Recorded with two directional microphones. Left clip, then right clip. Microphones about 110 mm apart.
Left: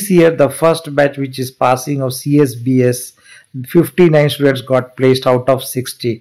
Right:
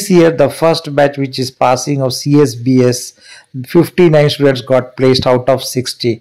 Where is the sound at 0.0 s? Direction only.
20° right (ahead or behind).